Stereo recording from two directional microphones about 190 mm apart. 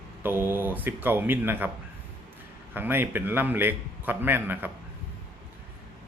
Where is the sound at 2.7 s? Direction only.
10° right (ahead or behind).